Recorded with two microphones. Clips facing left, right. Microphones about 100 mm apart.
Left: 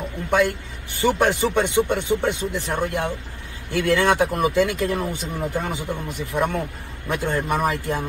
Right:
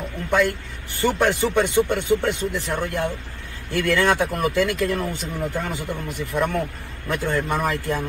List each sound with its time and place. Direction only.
0.3 s a man's voice: 20° left (ahead or behind)